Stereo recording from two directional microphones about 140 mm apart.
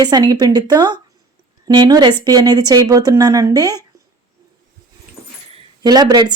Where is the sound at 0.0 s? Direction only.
30° right (ahead or behind).